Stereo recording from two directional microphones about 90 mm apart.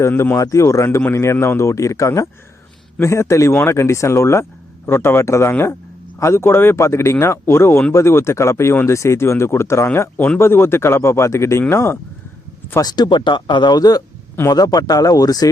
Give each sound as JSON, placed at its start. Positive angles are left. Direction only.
{"t": 0.1, "sound": "speech", "side_deg": 20}
{"t": 0.3, "sound": "speech", "side_deg": 35}
{"t": 0.9, "sound": "speech", "side_deg": 20}
{"t": 1.1, "sound": "speech", "side_deg": 30}
{"t": 12.8, "sound": "speech", "side_deg": 50}